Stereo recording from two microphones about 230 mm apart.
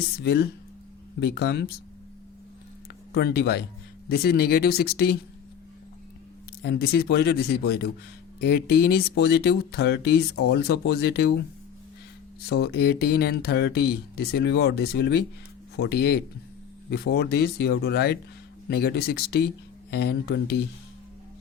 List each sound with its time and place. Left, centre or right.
0.2 s speech: left
3.1 s speech: left
6.6 s speech: left
12.5 s speech: left